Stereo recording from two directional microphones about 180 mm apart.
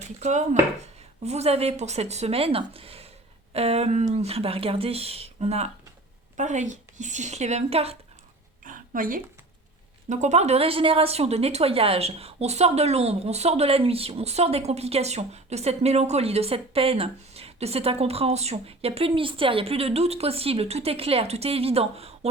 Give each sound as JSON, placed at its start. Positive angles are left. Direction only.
{"t": 0.2, "sound": "a woman's voice", "side_deg": -40}
{"t": 8.6, "sound": "a sound", "side_deg": -50}
{"t": 10.1, "sound": "a woman's voice", "side_deg": -40}